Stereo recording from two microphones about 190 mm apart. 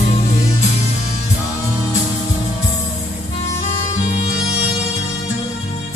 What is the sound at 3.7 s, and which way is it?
Music, 35° left (ahead or behind).